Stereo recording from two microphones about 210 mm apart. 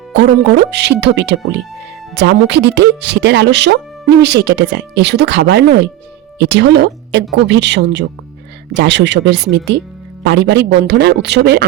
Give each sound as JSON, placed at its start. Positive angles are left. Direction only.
{"t": 0.1, "sound": "speech", "side_deg": -55}